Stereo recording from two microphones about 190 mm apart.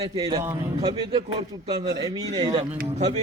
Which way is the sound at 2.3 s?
25° right (ahead or behind).